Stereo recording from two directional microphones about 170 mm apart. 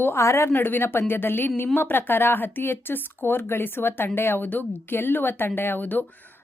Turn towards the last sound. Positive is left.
turn(degrees=10)  # may be behind; listen again after turning